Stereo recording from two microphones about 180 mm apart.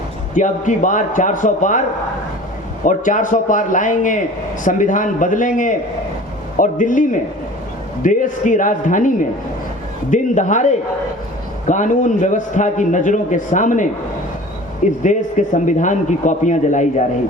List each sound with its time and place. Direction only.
0.3 s a man's voice: 45° left (ahead or behind)
2.8 s a man's voice: 45° left (ahead or behind)
14.8 s a man's voice: 45° left (ahead or behind)